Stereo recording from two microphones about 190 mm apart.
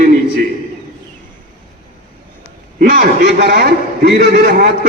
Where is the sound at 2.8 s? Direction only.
45° right (ahead or behind).